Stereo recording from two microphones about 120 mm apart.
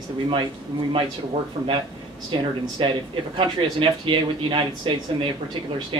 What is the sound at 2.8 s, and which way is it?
Speech, 45° right (ahead or behind).